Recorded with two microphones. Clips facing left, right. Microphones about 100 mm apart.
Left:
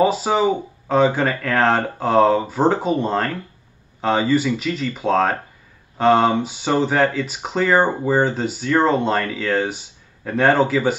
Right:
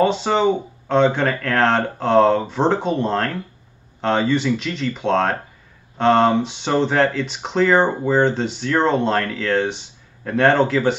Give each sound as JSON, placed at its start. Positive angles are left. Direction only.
{"t": 0.0, "sound": "speech", "side_deg": 5}